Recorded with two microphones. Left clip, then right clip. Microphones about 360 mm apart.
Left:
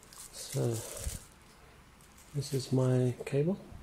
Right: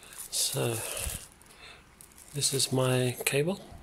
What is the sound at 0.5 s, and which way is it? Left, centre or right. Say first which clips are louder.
Speech: left 1 dB; right.